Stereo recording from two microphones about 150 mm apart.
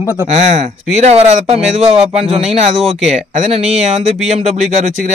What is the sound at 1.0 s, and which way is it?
Speech, 40° right (ahead or behind).